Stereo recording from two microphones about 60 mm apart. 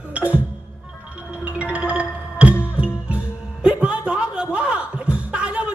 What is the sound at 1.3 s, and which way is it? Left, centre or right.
Music, centre.